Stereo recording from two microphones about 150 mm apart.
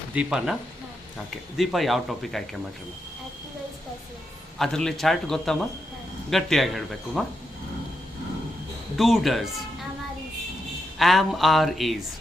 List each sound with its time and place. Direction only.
0.1 s speech: 5° right (ahead or behind)
1.5 s speech: centre (ahead or behind)
4.5 s speech: 5° left (ahead or behind)
9.0 s speech: centre (ahead or behind)
10.9 s speech: centre (ahead or behind)